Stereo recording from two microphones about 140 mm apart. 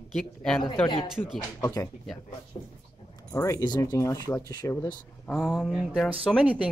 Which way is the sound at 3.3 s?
20° left (ahead or behind).